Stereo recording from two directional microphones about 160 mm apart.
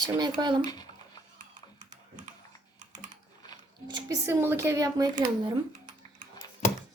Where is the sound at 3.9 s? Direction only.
25° right (ahead or behind).